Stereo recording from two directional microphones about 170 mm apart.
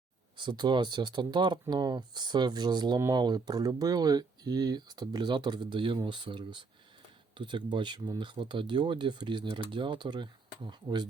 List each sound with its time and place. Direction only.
0.3 s speech: 25° right (ahead or behind)